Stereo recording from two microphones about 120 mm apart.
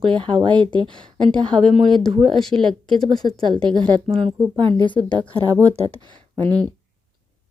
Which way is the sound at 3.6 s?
35° right (ahead or behind).